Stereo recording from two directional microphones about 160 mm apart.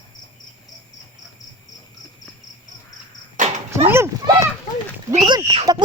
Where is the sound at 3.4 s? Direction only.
50° right (ahead or behind).